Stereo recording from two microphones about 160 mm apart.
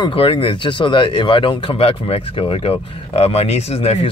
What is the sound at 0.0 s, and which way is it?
Speech, 35° left (ahead or behind).